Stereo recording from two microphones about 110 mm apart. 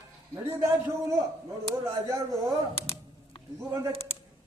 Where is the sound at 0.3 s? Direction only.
30° right (ahead or behind).